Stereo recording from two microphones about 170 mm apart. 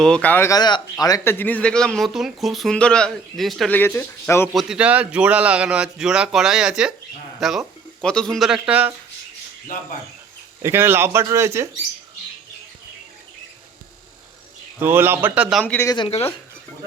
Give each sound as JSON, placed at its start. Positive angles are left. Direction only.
{"t": 0.0, "sound": "speech", "side_deg": 5}
{"t": 3.8, "sound": "speech", "side_deg": 15}
{"t": 4.5, "sound": "speech", "side_deg": -5}
{"t": 10.6, "sound": "speech", "side_deg": -15}
{"t": 14.8, "sound": "speech", "side_deg": -10}
{"t": 15.6, "sound": "speech", "side_deg": 10}
{"t": 15.9, "sound": "speech", "side_deg": 30}